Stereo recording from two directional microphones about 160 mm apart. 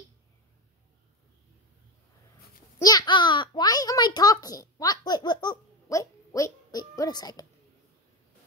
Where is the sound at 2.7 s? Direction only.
25° left (ahead or behind).